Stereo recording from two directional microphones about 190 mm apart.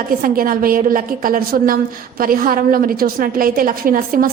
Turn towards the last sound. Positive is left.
turn(degrees=-50)  # may be behind; listen again after turning